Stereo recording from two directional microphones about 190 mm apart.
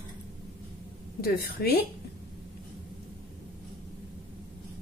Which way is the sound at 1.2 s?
55° left (ahead or behind).